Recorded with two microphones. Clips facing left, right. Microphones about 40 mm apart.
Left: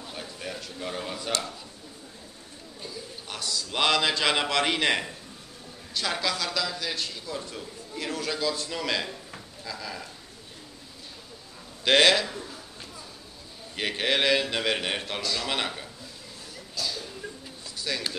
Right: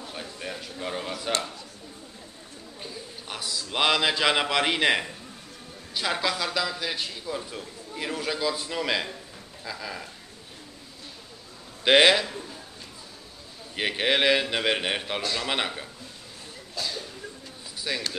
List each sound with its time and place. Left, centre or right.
0.0 s a sound: centre
3.3 s a man's voice: centre
11.8 s a man's voice: centre
13.7 s a man's voice: centre
16.7 s a sound: right
17.7 s basketball bounce: centre